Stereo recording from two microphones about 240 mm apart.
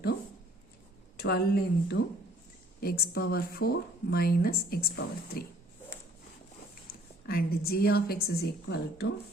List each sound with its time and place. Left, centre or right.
1.1 s a woman's voice: left
6.8 s a woman's voice: left